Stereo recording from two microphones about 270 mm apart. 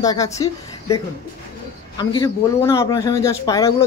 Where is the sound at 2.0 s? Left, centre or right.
Centre.